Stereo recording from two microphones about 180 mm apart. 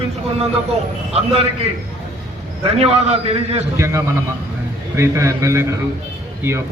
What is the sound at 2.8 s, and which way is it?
Speech, 35° right (ahead or behind).